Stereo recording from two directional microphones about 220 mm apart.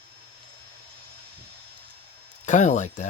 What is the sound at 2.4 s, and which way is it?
Speech, 35° left (ahead or behind).